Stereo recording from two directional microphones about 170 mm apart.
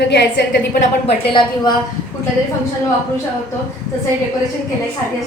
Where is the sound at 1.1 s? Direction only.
25° left (ahead or behind).